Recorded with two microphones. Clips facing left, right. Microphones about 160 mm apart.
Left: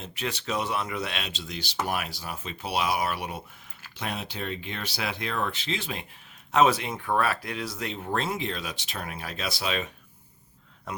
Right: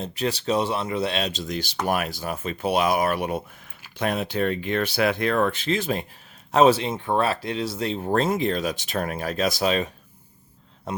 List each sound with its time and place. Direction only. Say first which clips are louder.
0.0 s speech: right 7 dB; 35° right (ahead or behind)
6.5 s speech: right 5 dB; 30° right (ahead or behind)
10.9 s a sound: right 6 dB; 30° right (ahead or behind)